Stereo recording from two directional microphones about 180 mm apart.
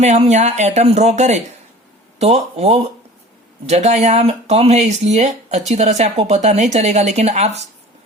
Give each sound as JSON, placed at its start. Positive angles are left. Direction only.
{"t": 0.0, "sound": "speech", "side_deg": -40}